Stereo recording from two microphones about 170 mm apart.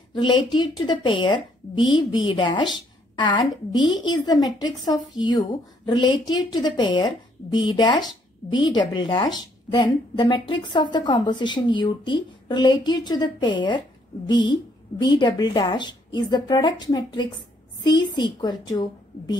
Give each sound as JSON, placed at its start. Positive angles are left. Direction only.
{"t": 0.1, "sound": "a woman's voice", "side_deg": 30}